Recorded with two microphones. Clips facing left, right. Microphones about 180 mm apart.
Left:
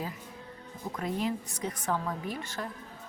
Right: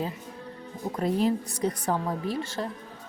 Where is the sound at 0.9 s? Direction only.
35° right (ahead or behind).